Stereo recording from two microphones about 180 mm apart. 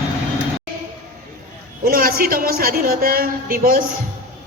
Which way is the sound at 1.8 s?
55° right (ahead or behind).